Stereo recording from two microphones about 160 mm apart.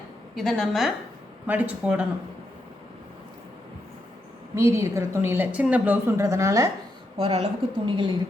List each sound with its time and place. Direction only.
0.3 s a woman's voice: centre (ahead or behind)
1.5 s a woman's voice: 10° right (ahead or behind)
4.5 s a woman's voice: 20° right (ahead or behind)
7.2 s speech: 40° right (ahead or behind)